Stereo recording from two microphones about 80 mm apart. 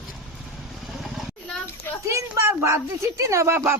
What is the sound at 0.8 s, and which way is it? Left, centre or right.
Vehicle, centre.